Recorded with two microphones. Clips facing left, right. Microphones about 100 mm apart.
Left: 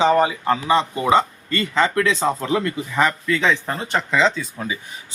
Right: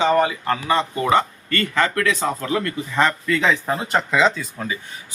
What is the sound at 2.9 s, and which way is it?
Speech, 5° left (ahead or behind).